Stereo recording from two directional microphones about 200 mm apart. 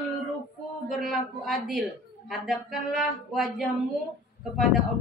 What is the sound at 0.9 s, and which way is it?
A woman's voice, centre (ahead or behind).